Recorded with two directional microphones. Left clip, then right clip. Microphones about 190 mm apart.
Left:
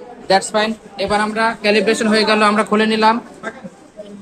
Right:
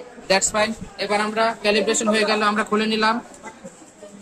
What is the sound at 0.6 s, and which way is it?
A woman's voice, 25° left (ahead or behind).